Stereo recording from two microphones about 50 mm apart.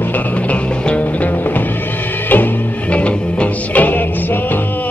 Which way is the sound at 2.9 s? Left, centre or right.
Left.